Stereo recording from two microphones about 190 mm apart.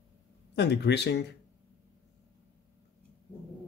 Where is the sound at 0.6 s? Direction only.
65° left (ahead or behind).